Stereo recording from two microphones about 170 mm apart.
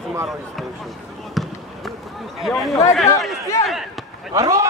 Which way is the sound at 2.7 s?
15° left (ahead or behind).